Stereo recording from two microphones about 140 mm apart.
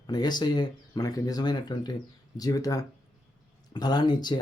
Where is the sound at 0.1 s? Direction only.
30° left (ahead or behind).